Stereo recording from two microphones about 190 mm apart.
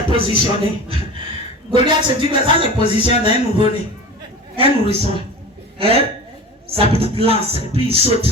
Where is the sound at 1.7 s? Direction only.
25° right (ahead or behind).